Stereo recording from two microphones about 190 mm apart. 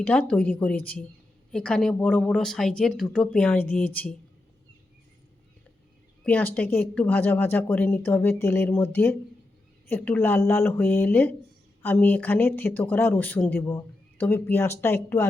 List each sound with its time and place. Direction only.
0.0 s speech: 5° left (ahead or behind)
6.2 s speech: 10° left (ahead or behind)